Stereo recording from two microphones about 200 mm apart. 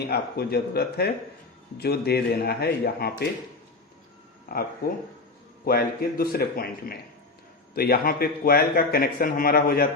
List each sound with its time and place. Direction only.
0.1 s speech: 50° left (ahead or behind)
4.5 s speech: 50° left (ahead or behind)
5.6 s speech: 50° left (ahead or behind)